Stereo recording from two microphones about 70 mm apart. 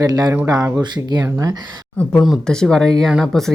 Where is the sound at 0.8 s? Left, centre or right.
Right.